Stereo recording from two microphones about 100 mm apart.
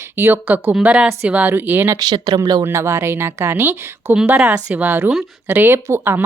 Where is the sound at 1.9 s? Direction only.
45° right (ahead or behind).